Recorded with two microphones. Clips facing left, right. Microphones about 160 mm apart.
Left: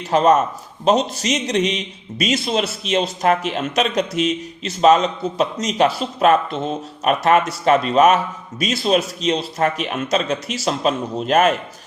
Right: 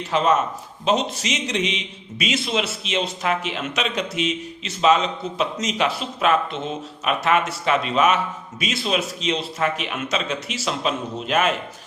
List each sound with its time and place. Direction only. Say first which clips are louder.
0.1 s a man's voice: left 5 dB; 40° left (ahead or behind)